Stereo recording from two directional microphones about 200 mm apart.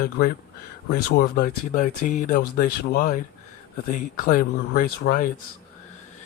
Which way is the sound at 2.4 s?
55° left (ahead or behind).